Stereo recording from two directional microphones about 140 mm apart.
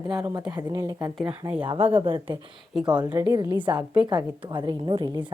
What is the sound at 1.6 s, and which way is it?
Speech, 40° right (ahead or behind).